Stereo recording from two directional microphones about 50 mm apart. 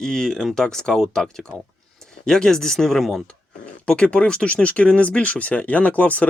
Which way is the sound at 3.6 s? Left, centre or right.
Left.